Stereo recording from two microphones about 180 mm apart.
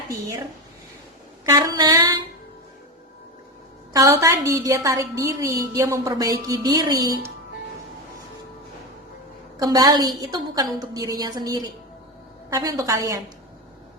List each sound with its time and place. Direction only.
1.5 s a woman's voice: 20° right (ahead or behind)
3.9 s a woman's voice: 20° right (ahead or behind)
9.6 s a woman's voice: 20° right (ahead or behind)